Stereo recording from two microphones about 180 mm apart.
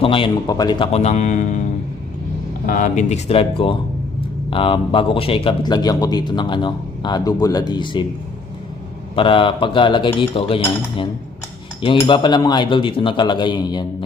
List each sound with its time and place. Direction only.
0.0 s speech: 30° left (ahead or behind)
0.9 s speech: 40° left (ahead or behind)
2.6 s speech: 45° left (ahead or behind); by 8.0 s 25° left (ahead or behind)
9.1 s speech: 30° left (ahead or behind)